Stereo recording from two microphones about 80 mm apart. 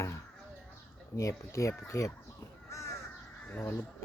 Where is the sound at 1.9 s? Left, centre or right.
Left.